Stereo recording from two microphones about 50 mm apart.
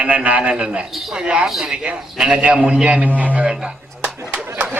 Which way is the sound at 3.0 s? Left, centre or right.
Right.